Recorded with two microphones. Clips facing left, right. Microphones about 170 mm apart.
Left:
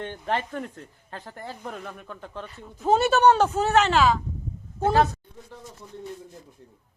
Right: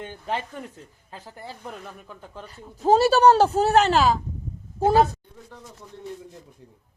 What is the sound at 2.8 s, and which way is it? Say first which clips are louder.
Speech: right 2 dB; 35° right (ahead or behind).